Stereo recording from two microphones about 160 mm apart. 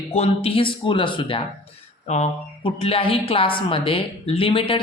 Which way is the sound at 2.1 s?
45° left (ahead or behind).